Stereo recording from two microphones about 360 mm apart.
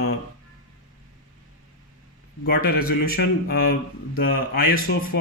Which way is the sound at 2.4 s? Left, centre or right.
Left.